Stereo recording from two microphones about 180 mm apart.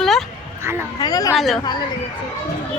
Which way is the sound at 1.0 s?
20° left (ahead or behind).